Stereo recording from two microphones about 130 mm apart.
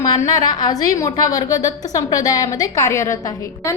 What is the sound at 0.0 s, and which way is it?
A woman's voice, 30° left (ahead or behind).